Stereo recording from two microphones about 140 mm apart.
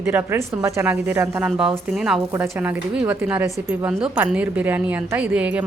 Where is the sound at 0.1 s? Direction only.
15° right (ahead or behind).